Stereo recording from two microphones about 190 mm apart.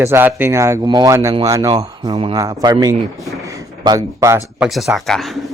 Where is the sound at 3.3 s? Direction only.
15° right (ahead or behind).